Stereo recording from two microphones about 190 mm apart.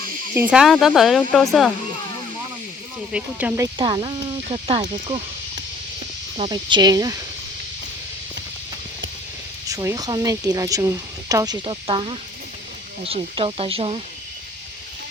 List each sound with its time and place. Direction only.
0.5 s speech: centre (ahead or behind)
3.1 s speech: 5° right (ahead or behind)
3.8 s speech: 25° right (ahead or behind)
6.3 s speech: 30° right (ahead or behind)
9.6 s speech: 20° right (ahead or behind)